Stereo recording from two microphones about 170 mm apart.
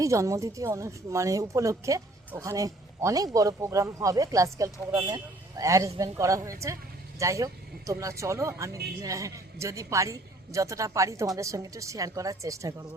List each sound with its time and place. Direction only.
0.0 s speech: 20° right (ahead or behind)